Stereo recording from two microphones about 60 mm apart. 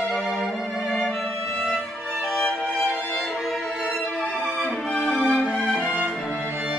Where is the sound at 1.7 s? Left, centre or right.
Centre.